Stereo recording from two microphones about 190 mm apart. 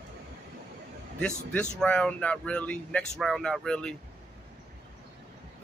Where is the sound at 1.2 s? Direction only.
5° left (ahead or behind).